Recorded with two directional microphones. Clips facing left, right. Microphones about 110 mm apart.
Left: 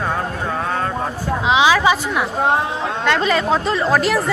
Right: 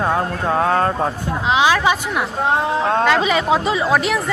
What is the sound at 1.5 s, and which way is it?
Speech, 5° left (ahead or behind).